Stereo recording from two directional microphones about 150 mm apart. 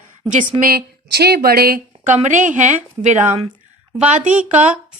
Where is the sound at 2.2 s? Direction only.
55° right (ahead or behind).